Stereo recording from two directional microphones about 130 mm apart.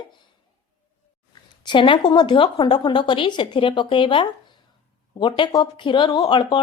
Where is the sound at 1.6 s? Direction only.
40° left (ahead or behind).